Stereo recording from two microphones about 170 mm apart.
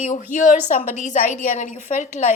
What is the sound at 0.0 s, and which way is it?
A woman's voice, 45° left (ahead or behind).